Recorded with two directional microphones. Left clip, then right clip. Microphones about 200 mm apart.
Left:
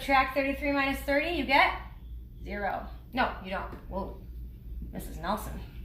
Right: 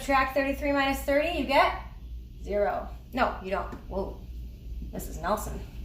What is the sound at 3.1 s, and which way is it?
Speech, 20° right (ahead or behind).